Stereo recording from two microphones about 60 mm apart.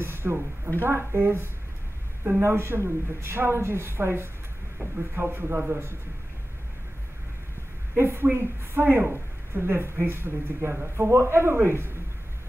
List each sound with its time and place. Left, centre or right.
0.0 s a sound: right
0.7 s a woman's voice: right
8.0 s a woman's voice: right